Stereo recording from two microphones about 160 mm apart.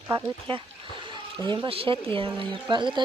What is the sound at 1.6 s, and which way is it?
Speech, 35° right (ahead or behind).